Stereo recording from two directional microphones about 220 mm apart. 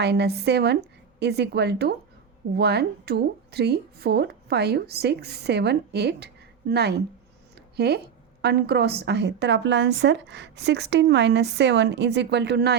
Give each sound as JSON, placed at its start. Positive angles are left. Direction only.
{"t": 0.0, "sound": "a woman's voice", "side_deg": -50}